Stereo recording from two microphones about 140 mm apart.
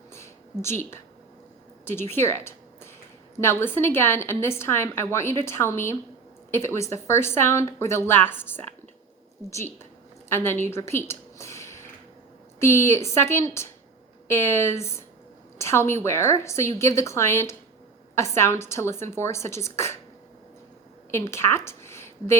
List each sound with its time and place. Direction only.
0.1 s a sound: 20° left (ahead or behind)
1.8 s a woman's voice: 15° left (ahead or behind)
10.2 s a woman's voice: 20° left (ahead or behind)
21.1 s a woman's voice: 20° left (ahead or behind)